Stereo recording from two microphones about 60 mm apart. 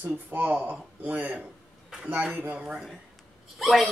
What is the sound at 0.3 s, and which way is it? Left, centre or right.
Speech, right.